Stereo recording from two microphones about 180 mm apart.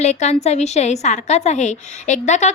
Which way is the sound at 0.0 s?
40° left (ahead or behind).